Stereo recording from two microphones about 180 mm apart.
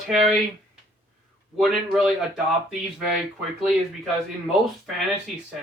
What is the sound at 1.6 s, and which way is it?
Speech, centre (ahead or behind).